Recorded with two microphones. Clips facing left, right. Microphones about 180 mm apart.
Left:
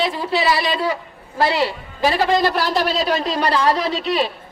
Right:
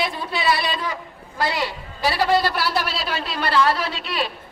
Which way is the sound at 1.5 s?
40° left (ahead or behind).